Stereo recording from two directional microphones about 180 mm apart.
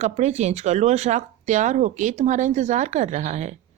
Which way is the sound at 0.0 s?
40° right (ahead or behind).